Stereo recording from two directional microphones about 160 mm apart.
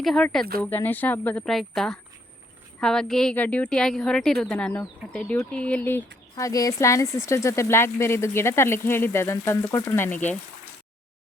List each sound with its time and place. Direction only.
0.0 s speech: 5° left (ahead or behind)